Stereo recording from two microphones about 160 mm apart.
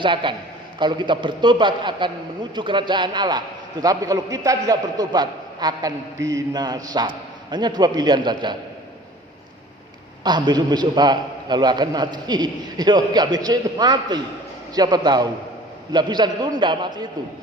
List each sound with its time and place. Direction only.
0.0 s a man's voice: 30° right (ahead or behind)
10.2 s a man's voice: 30° right (ahead or behind)